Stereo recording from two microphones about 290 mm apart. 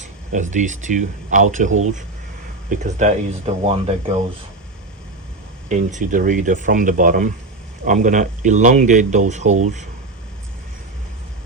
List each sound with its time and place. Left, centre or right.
0.0 s speech: right
5.6 s speech: right